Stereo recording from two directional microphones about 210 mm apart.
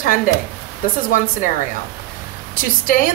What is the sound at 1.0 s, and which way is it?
Speech, 40° left (ahead or behind).